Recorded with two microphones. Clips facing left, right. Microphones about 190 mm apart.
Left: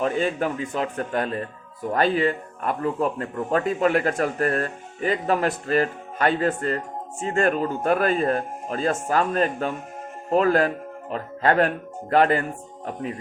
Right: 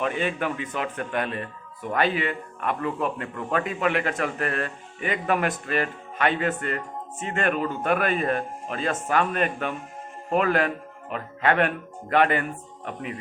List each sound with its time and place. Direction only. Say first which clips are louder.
0.0 s speech: left 3 dB; 40° left (ahead or behind)